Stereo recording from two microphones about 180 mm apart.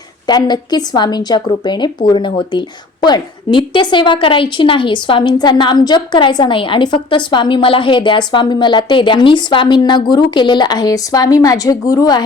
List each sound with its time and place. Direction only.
0.3 s a woman's voice: 25° left (ahead or behind)